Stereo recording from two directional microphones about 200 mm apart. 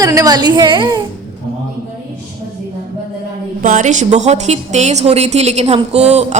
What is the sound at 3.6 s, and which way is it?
A woman's voice, 40° right (ahead or behind).